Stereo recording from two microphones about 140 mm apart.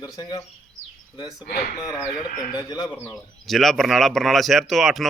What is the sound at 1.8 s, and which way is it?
Speech, 30° left (ahead or behind).